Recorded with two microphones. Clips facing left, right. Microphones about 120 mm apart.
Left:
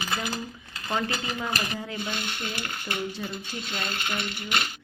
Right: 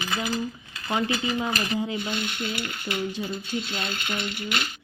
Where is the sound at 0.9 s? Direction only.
15° right (ahead or behind).